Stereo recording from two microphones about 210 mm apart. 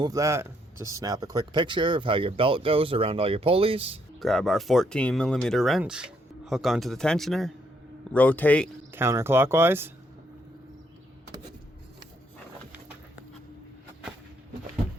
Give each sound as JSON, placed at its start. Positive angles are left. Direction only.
{"t": 0.0, "sound": "speech", "side_deg": -15}
{"t": 4.2, "sound": "a man's voice", "side_deg": 0}
{"t": 8.9, "sound": "speech", "side_deg": -10}